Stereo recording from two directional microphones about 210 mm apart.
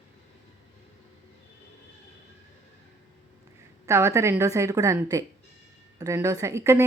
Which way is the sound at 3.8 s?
15° right (ahead or behind).